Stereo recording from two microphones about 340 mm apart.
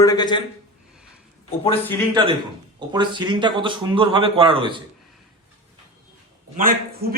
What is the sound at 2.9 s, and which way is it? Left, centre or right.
Speech, centre.